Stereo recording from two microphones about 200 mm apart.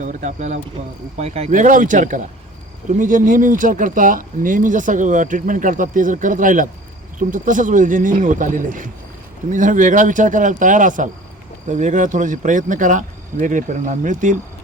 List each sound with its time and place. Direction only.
0.0 s speech: 35° right (ahead or behind)